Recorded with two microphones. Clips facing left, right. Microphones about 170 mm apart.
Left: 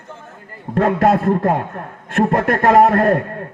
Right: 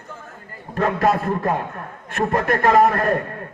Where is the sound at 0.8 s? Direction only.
60° left (ahead or behind).